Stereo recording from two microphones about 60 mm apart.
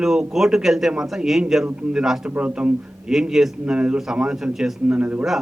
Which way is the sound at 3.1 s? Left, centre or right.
Centre.